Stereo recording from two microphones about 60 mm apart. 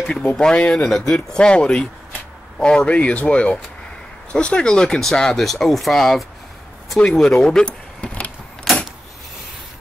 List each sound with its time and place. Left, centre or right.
0.0 s speech: centre